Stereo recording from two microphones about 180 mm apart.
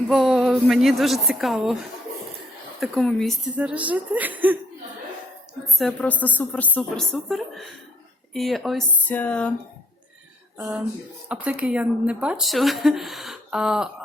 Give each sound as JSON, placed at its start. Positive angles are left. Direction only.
{"t": 0.1, "sound": "speech", "side_deg": 0}
{"t": 2.8, "sound": "speech", "side_deg": 5}
{"t": 5.8, "sound": "a woman's voice", "side_deg": 10}
{"t": 11.3, "sound": "speech", "side_deg": -5}